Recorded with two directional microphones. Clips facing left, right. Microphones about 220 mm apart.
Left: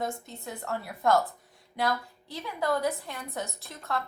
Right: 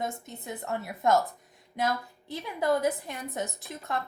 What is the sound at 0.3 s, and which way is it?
Speech, 20° right (ahead or behind).